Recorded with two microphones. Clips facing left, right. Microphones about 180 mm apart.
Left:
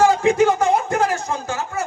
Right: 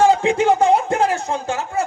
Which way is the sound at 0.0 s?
30° right (ahead or behind).